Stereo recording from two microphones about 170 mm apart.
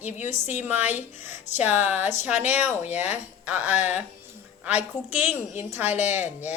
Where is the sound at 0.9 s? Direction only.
45° left (ahead or behind).